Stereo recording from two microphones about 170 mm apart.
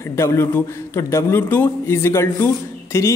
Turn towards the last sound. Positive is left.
turn(degrees=15)  # may be behind; listen again after turning